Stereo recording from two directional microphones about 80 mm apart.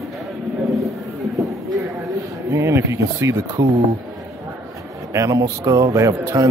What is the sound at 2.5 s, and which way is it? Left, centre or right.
Speech, right.